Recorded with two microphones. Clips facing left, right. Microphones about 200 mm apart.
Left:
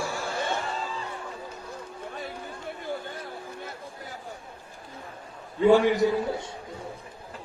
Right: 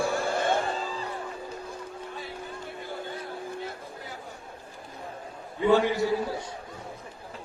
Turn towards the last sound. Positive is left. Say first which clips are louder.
# left 3 dB
turn(degrees=25)  # may be behind; listen again after turning